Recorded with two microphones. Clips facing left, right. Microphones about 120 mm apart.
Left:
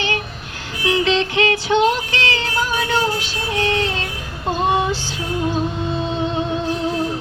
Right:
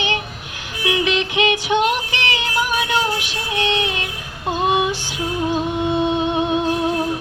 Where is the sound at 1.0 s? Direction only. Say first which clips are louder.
Left 1 dB; 15° right (ahead or behind).